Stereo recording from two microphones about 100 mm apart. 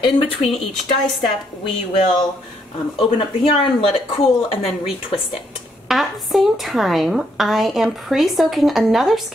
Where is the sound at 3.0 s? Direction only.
60° left (ahead or behind).